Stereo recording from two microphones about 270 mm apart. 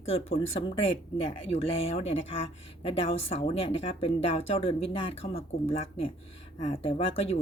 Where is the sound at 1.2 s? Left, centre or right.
Left.